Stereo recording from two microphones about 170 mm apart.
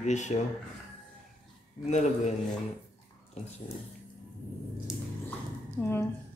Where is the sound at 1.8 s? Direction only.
40° left (ahead or behind).